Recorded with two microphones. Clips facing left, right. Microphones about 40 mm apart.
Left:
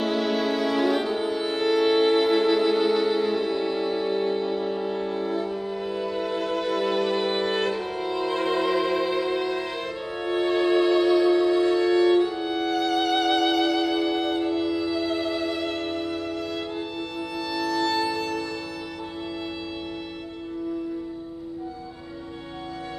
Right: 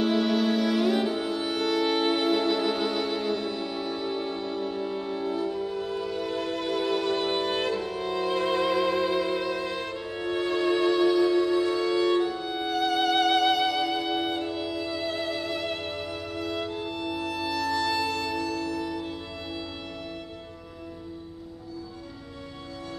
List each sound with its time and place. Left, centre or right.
0.0 s music: centre
5.5 s music: centre
7.3 s violin: centre
7.9 s music: centre
10.3 s music: centre
12.3 s music: centre
12.5 s music: centre
13.8 s music: centre
14.1 s violin: centre
14.4 s music: centre
17.7 s music: centre